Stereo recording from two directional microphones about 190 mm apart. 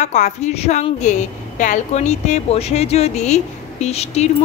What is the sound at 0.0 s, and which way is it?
A woman's voice, 40° left (ahead or behind).